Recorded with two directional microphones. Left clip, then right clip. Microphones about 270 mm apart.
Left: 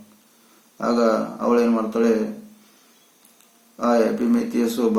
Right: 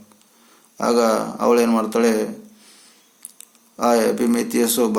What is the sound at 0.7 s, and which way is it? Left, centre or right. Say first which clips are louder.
A man's voice: right 2 dB; right.